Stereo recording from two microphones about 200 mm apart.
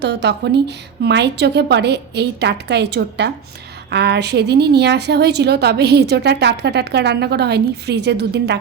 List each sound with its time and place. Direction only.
0.0 s a woman's voice: 60° right (ahead or behind)